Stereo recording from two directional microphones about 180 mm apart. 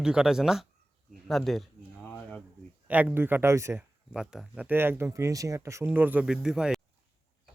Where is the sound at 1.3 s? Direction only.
Centre (ahead or behind).